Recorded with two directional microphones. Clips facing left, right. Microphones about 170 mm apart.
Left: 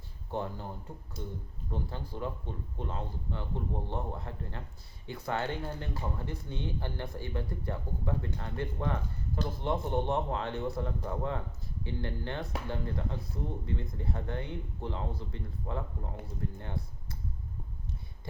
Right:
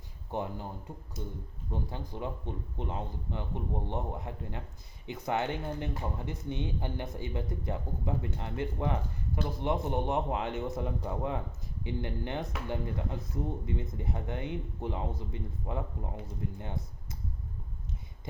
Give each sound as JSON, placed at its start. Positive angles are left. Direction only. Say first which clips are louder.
{"t": 0.3, "sound": "speech", "louder": "even", "side_deg": -15}
{"t": 1.7, "sound": "speech", "louder": "even", "side_deg": -15}